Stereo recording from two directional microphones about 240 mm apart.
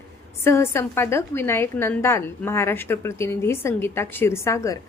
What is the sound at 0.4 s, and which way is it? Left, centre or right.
A woman's voice, centre.